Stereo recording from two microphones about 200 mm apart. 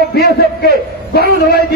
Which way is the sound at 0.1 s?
50° left (ahead or behind).